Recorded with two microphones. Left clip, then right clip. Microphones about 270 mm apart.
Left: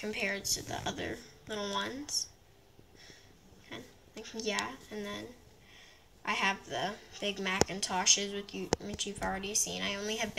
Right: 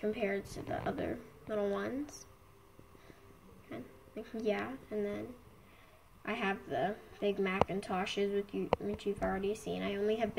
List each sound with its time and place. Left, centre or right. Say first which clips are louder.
0.0 s speech: left 1 dB; centre
3.7 s speech: right 1 dB; centre
6.2 s speech: left 5 dB; centre